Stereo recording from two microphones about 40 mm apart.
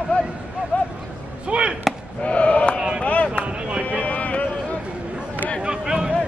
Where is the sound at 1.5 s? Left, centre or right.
Right.